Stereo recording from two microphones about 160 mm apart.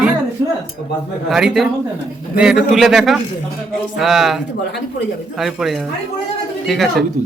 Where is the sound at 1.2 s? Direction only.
Centre (ahead or behind).